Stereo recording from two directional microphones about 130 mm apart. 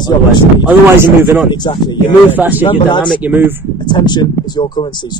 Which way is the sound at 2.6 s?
40° left (ahead or behind).